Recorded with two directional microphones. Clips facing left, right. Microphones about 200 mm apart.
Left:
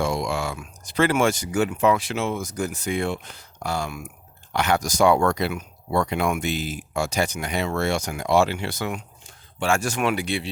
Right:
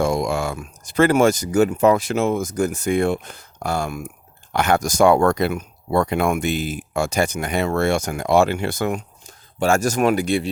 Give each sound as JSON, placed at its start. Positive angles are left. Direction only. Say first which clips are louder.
{"t": 0.0, "sound": "speech", "louder": "right 4 dB", "side_deg": -45}